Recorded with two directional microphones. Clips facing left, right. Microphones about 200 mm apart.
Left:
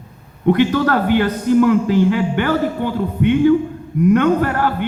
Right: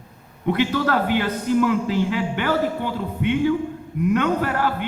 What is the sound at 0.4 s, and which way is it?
A man's voice, 55° left (ahead or behind).